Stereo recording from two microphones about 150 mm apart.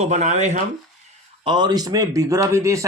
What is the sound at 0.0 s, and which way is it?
Speech, 50° right (ahead or behind).